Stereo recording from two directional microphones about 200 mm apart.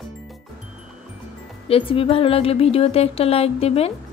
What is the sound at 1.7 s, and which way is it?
Speech, 25° left (ahead or behind).